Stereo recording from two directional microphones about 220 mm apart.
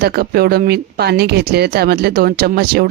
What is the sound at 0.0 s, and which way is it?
Speech, 45° right (ahead or behind).